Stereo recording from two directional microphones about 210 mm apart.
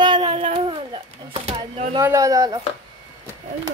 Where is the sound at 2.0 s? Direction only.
15° right (ahead or behind).